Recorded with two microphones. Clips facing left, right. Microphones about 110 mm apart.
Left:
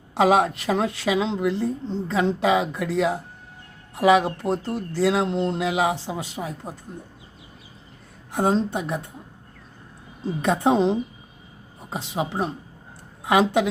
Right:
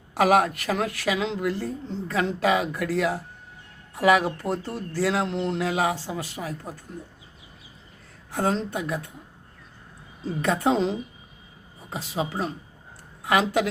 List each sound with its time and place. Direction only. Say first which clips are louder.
0.1 s a woman's voice: left 1 dB; 20° left (ahead or behind)
8.3 s a woman's voice: left 4 dB; 20° left (ahead or behind)
10.4 s a woman's voice: left 3 dB; 20° left (ahead or behind)